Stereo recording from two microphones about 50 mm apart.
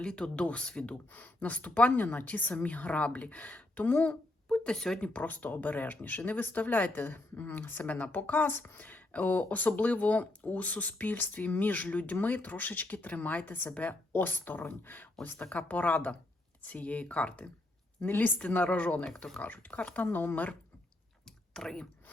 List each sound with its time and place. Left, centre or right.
0.0 s speech: centre
1.1 s speech: left
4.1 s a sound: centre
4.9 s speech: left
18.0 s speech: left
19.0 s speech: centre
19.4 s speech: left
20.1 s speech: left
21.2 s clicking: centre